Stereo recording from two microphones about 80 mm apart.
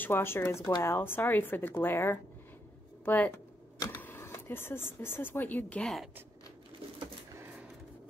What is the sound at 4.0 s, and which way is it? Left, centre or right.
Speech, left.